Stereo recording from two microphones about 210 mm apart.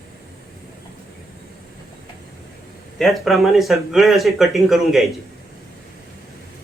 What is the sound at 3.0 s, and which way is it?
Speech, centre (ahead or behind).